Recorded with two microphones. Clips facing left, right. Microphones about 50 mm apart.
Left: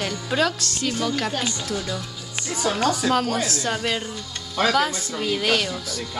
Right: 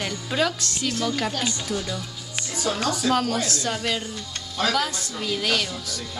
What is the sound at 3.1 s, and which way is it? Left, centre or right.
Speech, centre.